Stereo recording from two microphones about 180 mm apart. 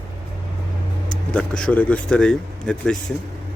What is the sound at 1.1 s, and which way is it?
Speech, 5° left (ahead or behind).